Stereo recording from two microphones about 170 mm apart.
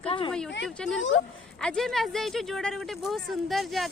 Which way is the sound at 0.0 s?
30° left (ahead or behind).